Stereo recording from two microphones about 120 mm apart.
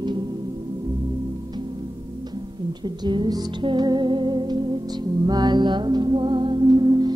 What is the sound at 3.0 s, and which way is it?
Music, 40° right (ahead or behind).